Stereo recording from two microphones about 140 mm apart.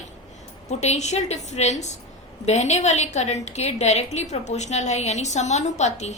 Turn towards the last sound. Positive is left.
turn(degrees=55)  # may be behind; listen again after turning